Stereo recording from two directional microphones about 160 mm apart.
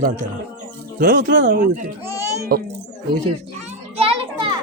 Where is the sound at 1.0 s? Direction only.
55° right (ahead or behind).